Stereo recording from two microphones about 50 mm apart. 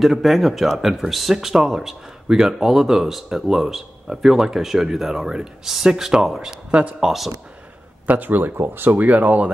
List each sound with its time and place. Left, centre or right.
0.0 s speech: centre
6.7 s speech: right
7.0 s speech: centre
8.1 s speech: right